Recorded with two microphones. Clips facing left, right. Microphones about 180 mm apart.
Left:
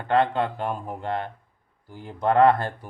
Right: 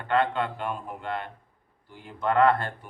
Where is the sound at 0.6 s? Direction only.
40° left (ahead or behind).